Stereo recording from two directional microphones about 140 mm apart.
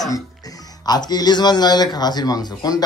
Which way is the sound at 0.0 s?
25° left (ahead or behind).